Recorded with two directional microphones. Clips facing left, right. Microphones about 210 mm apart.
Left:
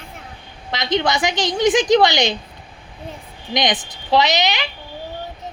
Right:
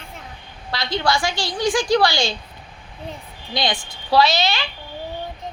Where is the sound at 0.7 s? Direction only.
20° left (ahead or behind).